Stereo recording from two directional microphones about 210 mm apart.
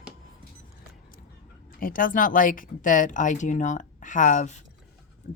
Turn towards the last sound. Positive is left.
turn(degrees=35)  # may be behind; listen again after turning